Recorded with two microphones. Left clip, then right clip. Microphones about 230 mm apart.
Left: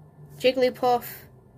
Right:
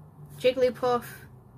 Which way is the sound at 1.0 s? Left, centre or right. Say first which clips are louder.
Left 1 dB; right.